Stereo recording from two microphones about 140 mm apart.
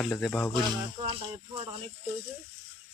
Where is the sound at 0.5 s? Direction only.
35° right (ahead or behind).